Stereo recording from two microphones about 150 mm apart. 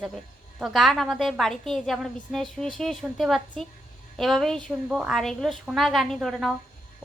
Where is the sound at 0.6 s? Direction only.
Centre (ahead or behind).